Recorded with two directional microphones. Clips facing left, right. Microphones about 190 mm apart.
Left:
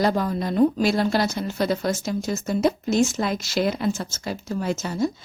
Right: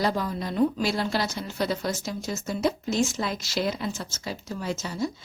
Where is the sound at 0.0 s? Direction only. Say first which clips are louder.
Left 5 dB; 50° left (ahead or behind).